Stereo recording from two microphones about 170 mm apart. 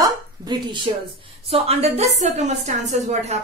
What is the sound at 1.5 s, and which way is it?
A woman's voice, 35° right (ahead or behind).